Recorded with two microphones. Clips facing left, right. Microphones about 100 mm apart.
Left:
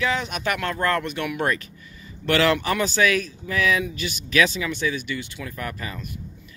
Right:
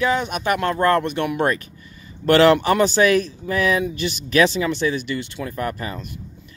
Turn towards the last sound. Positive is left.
turn(degrees=-30)  # may be behind; listen again after turning